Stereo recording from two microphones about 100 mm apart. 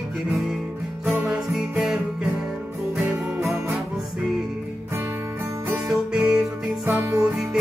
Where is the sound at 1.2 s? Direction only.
10° right (ahead or behind).